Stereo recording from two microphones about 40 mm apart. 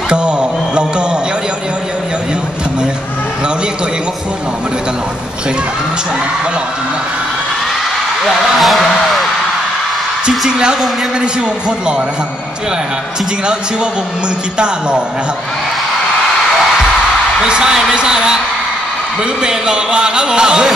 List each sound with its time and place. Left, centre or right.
0.1 s music: right
8.3 s speech: centre
10.4 s speech: right
14.6 s speech: right
17.5 s speech: centre
19.4 s speech: right